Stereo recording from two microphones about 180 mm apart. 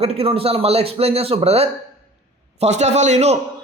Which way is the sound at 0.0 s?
35° right (ahead or behind).